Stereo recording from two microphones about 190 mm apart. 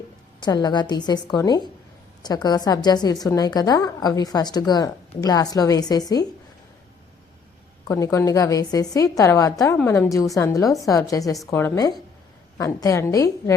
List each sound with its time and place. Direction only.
0.3 s a woman's voice: 20° left (ahead or behind)
7.9 s a woman's voice: 15° left (ahead or behind)